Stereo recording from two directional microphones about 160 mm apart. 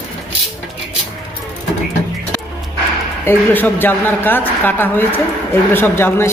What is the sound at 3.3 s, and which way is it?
A woman's voice, 10° left (ahead or behind).